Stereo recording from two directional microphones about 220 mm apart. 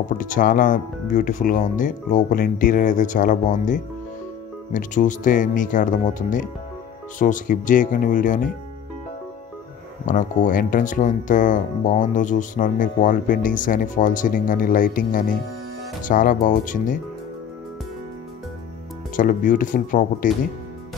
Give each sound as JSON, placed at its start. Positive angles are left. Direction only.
{"t": 0.2, "sound": "speech", "side_deg": 40}
{"t": 10.0, "sound": "speech", "side_deg": 35}
{"t": 19.1, "sound": "speech", "side_deg": 40}